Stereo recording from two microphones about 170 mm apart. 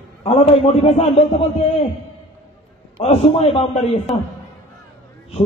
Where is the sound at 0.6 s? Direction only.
35° left (ahead or behind).